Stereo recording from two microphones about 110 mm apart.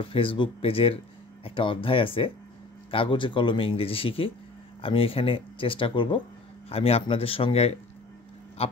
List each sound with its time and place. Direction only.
0.0 s speech: 55° left (ahead or behind)
6.7 s speech: 60° left (ahead or behind)